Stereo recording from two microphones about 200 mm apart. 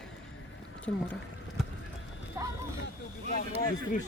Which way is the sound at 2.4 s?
15° right (ahead or behind).